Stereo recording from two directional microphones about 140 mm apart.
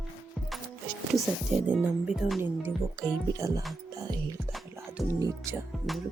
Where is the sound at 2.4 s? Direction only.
15° right (ahead or behind).